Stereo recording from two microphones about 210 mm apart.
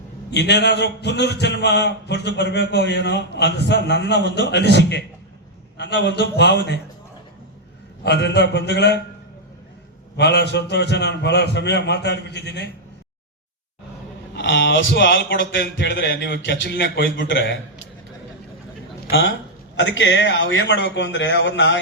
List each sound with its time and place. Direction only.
0.3 s speech: 55° left (ahead or behind)
8.0 s speech: 55° left (ahead or behind)
10.2 s speech: 55° left (ahead or behind)
14.3 s speech: 60° left (ahead or behind)
19.1 s speech: 55° left (ahead or behind)